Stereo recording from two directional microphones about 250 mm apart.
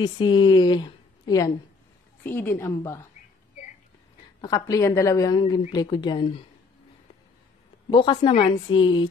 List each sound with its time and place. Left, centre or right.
0.0 s a woman's voice: centre
4.4 s a woman's voice: centre
7.9 s a woman's voice: centre